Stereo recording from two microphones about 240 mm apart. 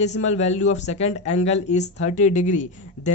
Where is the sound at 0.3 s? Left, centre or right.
Left.